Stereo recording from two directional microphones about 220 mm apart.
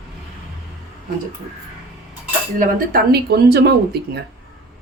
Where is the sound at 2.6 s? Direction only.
45° right (ahead or behind).